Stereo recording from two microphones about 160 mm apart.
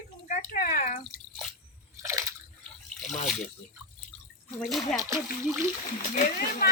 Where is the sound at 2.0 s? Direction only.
20° right (ahead or behind).